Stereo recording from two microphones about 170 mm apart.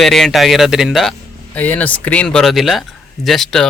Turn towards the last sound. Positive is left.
turn(degrees=0)  # may be behind; listen again after turning